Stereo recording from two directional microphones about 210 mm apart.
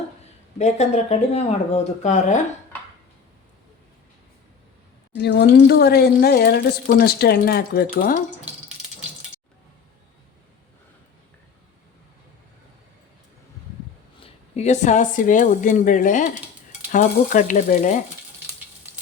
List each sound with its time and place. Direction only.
0.6 s speech: 30° left (ahead or behind)
5.1 s speech: 55° left (ahead or behind)
14.5 s speech: 35° left (ahead or behind)